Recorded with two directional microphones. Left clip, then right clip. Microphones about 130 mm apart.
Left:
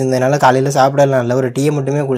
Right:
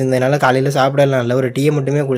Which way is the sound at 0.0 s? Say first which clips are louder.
Left 2 dB; 20° right (ahead or behind).